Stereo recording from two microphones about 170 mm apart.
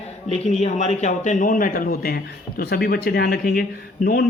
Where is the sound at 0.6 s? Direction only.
45° left (ahead or behind).